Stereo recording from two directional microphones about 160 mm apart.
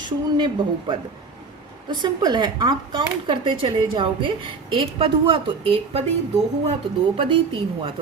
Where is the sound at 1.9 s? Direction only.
25° right (ahead or behind).